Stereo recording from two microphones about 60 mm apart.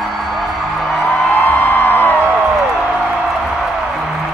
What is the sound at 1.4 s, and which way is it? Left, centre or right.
Music, left.